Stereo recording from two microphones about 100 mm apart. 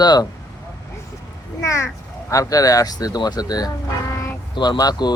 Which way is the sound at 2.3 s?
35° left (ahead or behind).